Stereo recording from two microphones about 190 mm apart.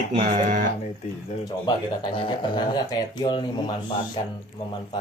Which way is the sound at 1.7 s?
25° left (ahead or behind).